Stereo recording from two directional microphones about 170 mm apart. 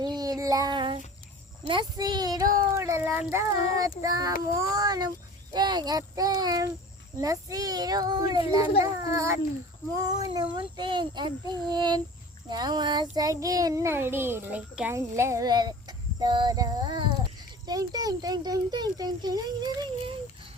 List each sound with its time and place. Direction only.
0.0 s child singing: 25° right (ahead or behind)
2.7 s cat: 15° right (ahead or behind)
3.8 s a child's voice: 20° right (ahead or behind)